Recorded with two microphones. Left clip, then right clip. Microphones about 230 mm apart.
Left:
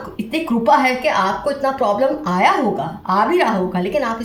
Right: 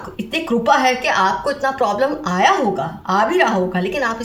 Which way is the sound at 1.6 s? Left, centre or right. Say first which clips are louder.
Left 2 dB; right.